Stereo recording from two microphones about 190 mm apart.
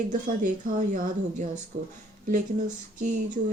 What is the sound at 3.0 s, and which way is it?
Speech, 40° right (ahead or behind).